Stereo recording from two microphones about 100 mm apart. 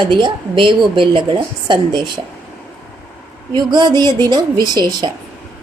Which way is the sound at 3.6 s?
45° right (ahead or behind).